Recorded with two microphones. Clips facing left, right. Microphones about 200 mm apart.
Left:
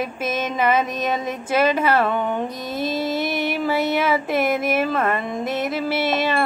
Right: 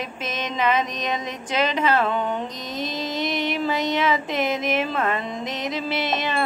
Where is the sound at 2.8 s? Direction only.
5° left (ahead or behind).